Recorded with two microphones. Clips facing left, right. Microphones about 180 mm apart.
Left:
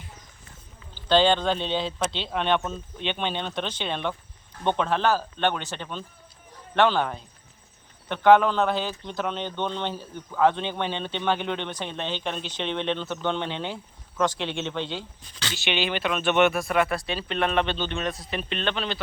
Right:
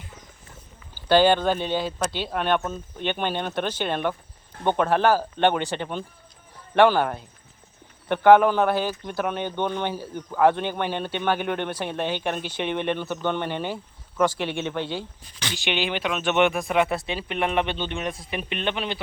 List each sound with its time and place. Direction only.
1.0 s speech: 10° right (ahead or behind)